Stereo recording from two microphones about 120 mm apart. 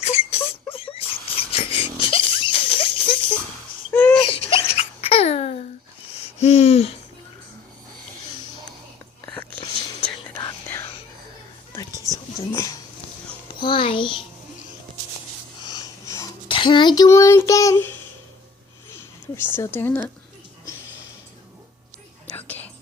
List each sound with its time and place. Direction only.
0.0 s a sound: 55° left (ahead or behind)
6.4 s hoot: 65° left (ahead or behind)
9.2 s whispering: 10° left (ahead or behind)
11.8 s whispering: 30° left (ahead or behind)
12.5 s a sound: 25° left (ahead or behind)
13.6 s a sound: 45° left (ahead or behind)
15.6 s wheeze: 30° left (ahead or behind)
16.5 s child singing: 45° left (ahead or behind); by 17.8 s 25° left (ahead or behind)
19.4 s a woman's voice: 20° left (ahead or behind)
22.4 s whispering: 15° left (ahead or behind)